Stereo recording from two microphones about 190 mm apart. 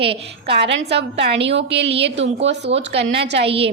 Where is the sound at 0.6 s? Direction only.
65° right (ahead or behind).